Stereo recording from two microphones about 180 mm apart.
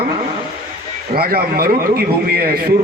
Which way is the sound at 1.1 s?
55° right (ahead or behind).